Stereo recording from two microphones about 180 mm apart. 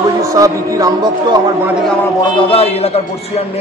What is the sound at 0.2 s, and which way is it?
Speech, 20° right (ahead or behind).